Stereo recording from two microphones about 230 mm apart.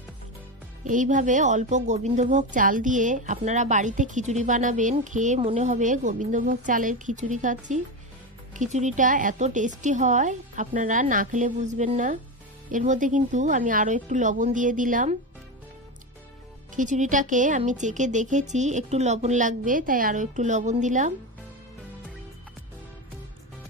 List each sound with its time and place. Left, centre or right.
0.8 s speech: right
16.7 s speech: right